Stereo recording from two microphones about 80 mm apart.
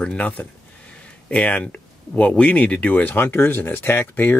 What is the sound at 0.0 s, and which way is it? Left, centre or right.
Speech, centre.